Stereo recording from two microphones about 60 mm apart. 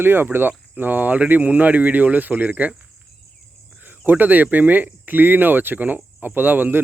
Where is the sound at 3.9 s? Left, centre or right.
Right.